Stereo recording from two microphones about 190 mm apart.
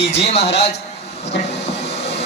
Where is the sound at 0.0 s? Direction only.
35° left (ahead or behind).